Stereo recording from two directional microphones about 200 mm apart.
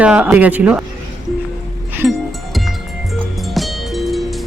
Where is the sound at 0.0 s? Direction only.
5° right (ahead or behind).